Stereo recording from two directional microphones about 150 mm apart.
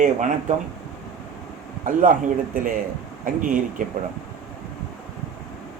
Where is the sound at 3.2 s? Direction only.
65° right (ahead or behind).